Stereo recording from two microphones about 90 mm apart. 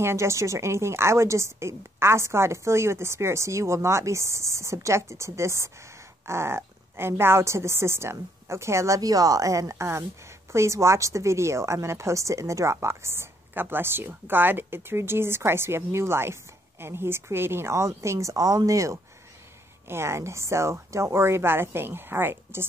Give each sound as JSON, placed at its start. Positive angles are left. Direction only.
{"t": 0.0, "sound": "a woman's voice", "side_deg": -30}